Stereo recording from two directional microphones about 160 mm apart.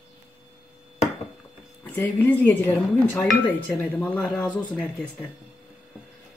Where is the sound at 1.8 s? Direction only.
10° left (ahead or behind).